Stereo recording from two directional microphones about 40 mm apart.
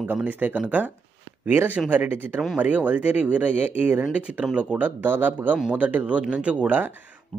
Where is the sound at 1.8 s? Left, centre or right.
Right.